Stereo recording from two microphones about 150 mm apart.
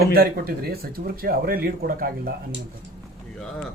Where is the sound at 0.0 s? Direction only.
85° right.